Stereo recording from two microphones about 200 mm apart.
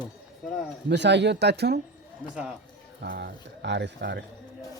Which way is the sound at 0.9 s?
60° right (ahead or behind).